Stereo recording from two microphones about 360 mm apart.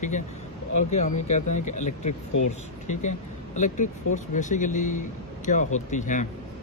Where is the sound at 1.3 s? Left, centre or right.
Centre.